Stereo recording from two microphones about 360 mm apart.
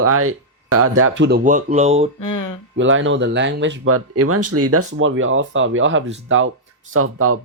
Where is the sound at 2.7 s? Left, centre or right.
Right.